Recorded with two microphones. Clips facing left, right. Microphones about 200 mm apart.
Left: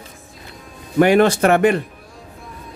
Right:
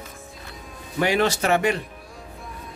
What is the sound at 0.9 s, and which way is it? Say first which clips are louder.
Speech: left 8 dB; 55° left (ahead or behind).